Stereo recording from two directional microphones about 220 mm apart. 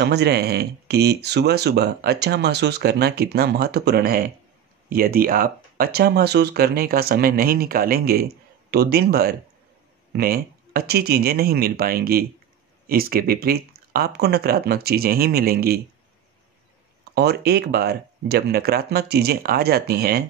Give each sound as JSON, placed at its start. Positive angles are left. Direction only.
{"t": 0.0, "sound": "speech", "side_deg": -50}
{"t": 17.1, "sound": "speech", "side_deg": -50}